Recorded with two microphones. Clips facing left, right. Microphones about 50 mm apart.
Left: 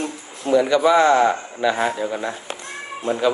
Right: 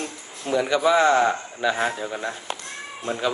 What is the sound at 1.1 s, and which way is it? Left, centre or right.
Speech, centre.